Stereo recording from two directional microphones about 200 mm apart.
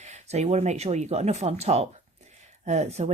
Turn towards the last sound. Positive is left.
turn(degrees=-35)  # may be behind; listen again after turning